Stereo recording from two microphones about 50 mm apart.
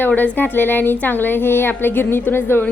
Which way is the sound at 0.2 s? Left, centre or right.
Left.